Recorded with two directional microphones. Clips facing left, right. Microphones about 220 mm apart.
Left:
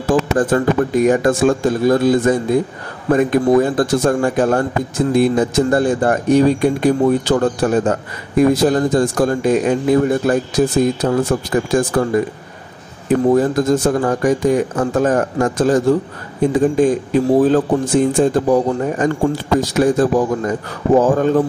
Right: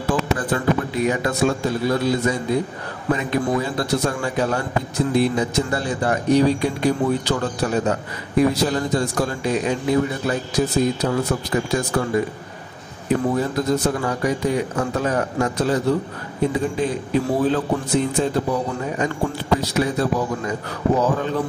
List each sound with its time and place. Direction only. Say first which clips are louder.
0.1 s a man's voice: left 7 dB; 45° left (ahead or behind)
13.4 s a man's voice: left 6 dB; 50° left (ahead or behind)